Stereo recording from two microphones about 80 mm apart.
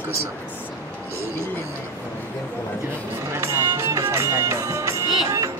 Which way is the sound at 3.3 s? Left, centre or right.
Right.